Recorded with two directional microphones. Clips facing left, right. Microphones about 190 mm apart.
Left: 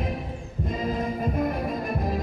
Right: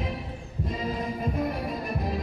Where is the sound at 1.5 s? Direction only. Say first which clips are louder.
Left 3 dB; 45° left (ahead or behind).